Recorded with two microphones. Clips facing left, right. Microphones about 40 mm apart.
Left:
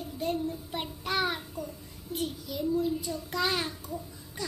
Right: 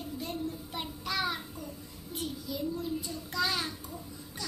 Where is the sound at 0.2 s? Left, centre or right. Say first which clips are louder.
Left 8 dB; left.